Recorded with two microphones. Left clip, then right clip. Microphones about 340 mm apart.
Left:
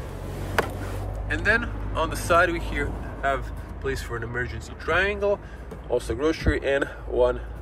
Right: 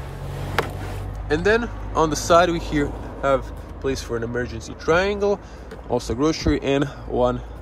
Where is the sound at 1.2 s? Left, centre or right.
Centre.